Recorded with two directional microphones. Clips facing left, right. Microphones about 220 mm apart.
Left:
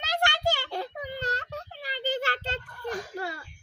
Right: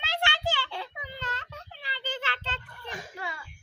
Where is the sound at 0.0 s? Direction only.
40° left (ahead or behind).